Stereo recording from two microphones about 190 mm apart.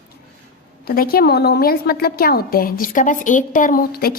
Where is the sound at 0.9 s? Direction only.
50° left (ahead or behind).